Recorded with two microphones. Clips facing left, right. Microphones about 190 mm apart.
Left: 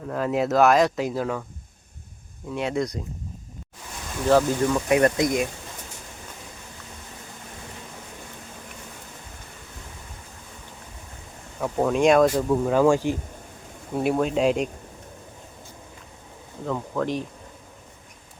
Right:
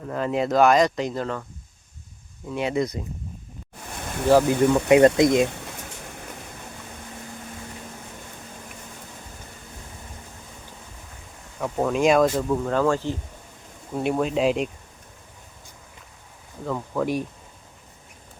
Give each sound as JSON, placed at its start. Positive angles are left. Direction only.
{"t": 0.0, "sound": "speech", "side_deg": 0}
{"t": 2.5, "sound": "speech", "side_deg": 0}
{"t": 4.3, "sound": "speech", "side_deg": -10}
{"t": 4.7, "sound": "speech", "side_deg": -25}
{"t": 11.6, "sound": "speech", "side_deg": 0}
{"t": 13.9, "sound": "speech", "side_deg": 0}
{"t": 16.6, "sound": "speech", "side_deg": -5}